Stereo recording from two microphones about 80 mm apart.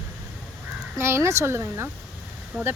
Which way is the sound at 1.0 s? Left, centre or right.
Right.